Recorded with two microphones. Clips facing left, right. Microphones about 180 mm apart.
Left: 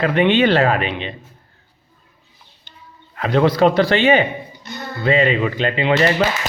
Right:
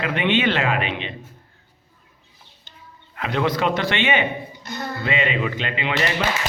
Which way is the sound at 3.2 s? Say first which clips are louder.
Left 7 dB; 35° left (ahead or behind).